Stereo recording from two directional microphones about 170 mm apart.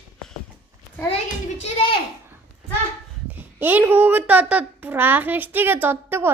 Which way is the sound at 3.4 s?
10° right (ahead or behind).